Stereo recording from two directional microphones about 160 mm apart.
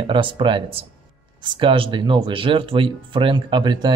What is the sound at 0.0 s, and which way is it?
Speech, 30° right (ahead or behind).